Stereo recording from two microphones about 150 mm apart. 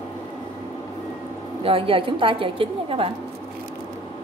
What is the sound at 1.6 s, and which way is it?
A woman's voice, 35° right (ahead or behind).